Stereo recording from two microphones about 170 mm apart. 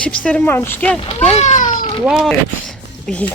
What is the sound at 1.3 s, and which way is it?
Speech, 45° left (ahead or behind).